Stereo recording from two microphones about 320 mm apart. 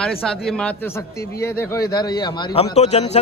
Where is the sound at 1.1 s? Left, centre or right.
Left.